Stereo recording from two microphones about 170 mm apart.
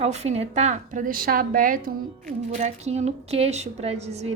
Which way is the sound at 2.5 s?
40° right (ahead or behind).